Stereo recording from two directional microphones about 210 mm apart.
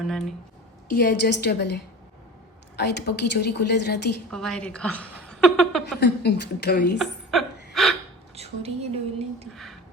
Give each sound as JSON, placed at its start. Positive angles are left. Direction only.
{"t": 0.1, "sound": "speech", "side_deg": 0}
{"t": 0.9, "sound": "a woman's voice", "side_deg": 50}
{"t": 4.3, "sound": "a woman's voice", "side_deg": 5}
{"t": 6.0, "sound": "a woman's voice", "side_deg": 50}
{"t": 7.0, "sound": "chuckle", "side_deg": 0}
{"t": 8.4, "sound": "a woman's voice", "side_deg": -30}